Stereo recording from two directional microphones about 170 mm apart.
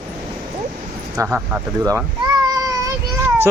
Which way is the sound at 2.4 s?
20° right (ahead or behind).